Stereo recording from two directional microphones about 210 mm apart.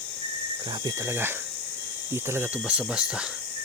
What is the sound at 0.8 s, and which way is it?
Speech, 15° right (ahead or behind).